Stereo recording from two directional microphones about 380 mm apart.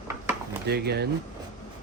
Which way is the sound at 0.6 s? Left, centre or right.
Right.